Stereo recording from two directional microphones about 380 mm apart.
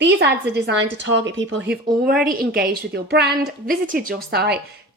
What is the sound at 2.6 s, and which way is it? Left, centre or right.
Speech, right.